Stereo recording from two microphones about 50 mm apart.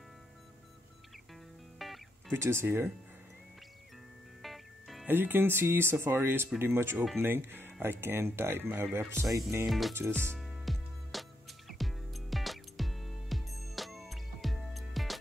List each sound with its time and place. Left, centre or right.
1.8 s music: centre
2.3 s speech: right
4.4 s music: centre
5.0 s speech: right
8.9 s speech: right
9.7 s music: centre